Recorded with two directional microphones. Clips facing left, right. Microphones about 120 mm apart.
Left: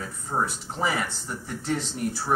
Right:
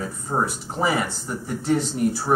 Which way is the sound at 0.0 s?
20° right (ahead or behind).